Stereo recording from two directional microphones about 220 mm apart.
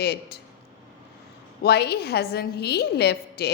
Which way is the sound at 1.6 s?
45° left (ahead or behind).